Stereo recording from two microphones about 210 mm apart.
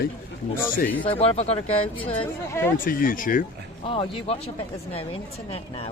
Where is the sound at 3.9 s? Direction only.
25° left (ahead or behind).